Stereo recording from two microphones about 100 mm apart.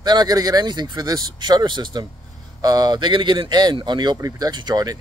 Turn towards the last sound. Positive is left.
turn(degrees=-40)  # may be behind; listen again after turning